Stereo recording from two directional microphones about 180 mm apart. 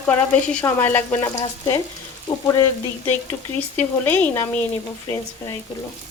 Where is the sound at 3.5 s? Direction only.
10° left (ahead or behind).